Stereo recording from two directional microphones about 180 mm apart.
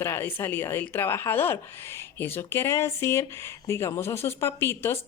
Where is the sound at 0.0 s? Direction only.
15° left (ahead or behind).